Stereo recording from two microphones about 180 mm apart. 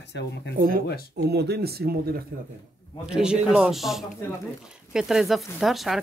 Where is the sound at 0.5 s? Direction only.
55° right (ahead or behind).